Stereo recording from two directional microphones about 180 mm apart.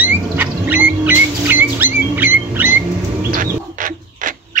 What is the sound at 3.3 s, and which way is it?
Bird, 50° right (ahead or behind).